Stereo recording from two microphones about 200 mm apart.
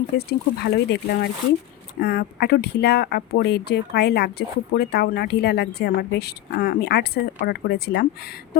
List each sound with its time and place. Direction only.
0.2 s speech: 50° left (ahead or behind)